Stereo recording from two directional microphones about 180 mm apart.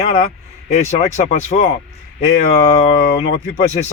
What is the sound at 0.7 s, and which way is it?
Speech, 40° left (ahead or behind).